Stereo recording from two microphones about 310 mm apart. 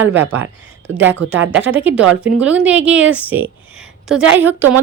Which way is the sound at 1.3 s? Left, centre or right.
Right.